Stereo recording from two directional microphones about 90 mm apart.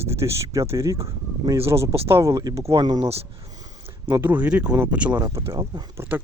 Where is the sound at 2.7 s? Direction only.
50° right (ahead or behind).